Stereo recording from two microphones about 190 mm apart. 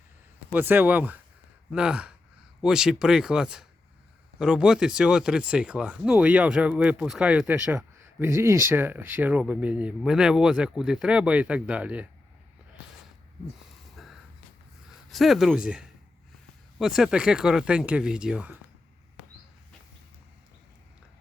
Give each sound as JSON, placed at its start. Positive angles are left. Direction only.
{"t": 0.5, "sound": "speech", "side_deg": -10}
{"t": 13.9, "sound": "a sound", "side_deg": 0}
{"t": 14.8, "sound": "speech", "side_deg": 0}